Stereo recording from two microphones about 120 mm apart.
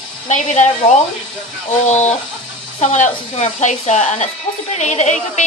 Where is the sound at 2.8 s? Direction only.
80° left.